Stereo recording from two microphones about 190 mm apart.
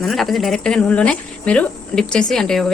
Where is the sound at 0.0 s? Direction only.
Centre (ahead or behind).